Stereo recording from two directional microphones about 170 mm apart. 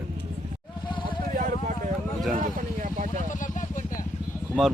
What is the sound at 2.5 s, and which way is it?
Vehicle, 50° right (ahead or behind).